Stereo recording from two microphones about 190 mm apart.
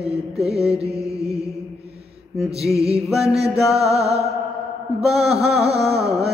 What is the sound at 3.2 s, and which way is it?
Music, 35° right (ahead or behind).